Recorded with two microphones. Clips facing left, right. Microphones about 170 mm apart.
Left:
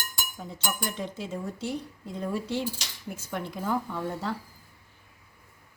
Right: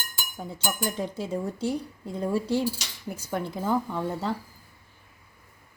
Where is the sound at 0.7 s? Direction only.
40° right (ahead or behind).